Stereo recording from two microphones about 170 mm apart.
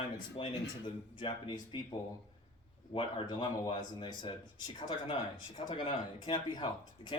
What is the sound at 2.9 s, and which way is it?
Speech, 30° left (ahead or behind).